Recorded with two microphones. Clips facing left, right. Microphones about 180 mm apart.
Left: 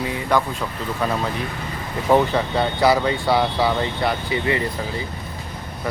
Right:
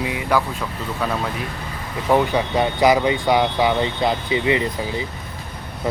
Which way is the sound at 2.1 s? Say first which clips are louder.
Even; 15° right (ahead or behind).